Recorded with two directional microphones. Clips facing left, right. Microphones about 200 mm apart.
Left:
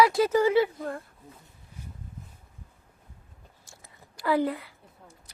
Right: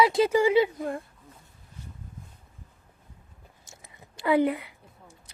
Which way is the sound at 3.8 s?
20° right (ahead or behind).